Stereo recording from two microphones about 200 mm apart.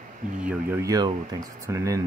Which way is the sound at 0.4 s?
10° right (ahead or behind).